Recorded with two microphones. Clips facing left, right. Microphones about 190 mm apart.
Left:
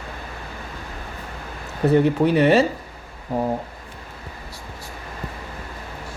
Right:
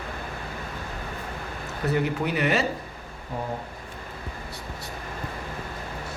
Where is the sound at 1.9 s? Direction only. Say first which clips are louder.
Left 9 dB; 30° left (ahead or behind).